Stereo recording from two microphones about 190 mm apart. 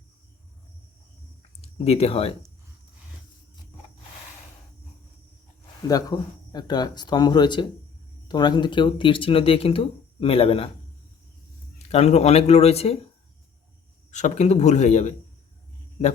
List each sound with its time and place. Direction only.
1.4 s a sound: 35° left (ahead or behind)
5.9 s speech: 20° left (ahead or behind)
11.9 s speech: 35° left (ahead or behind)
14.1 s speech: 40° left (ahead or behind)